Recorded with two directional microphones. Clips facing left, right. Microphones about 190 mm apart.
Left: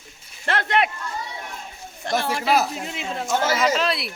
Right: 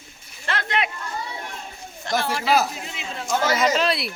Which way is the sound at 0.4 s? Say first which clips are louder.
Left 4 dB; 55° left (ahead or behind).